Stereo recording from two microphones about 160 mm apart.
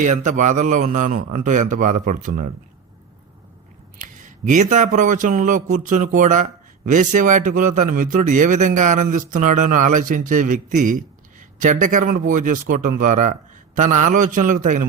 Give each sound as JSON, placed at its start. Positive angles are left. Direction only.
{"t": 0.0, "sound": "a man's voice", "side_deg": -50}
{"t": 3.9, "sound": "a man's voice", "side_deg": -50}